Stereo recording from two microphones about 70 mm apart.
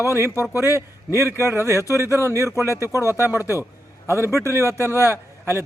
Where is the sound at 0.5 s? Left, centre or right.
Left.